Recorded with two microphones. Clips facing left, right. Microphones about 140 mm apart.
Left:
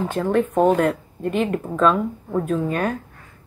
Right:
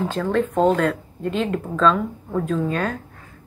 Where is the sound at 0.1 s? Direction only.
15° left (ahead or behind).